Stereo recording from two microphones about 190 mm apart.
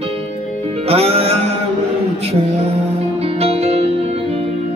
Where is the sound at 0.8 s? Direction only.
30° right (ahead or behind).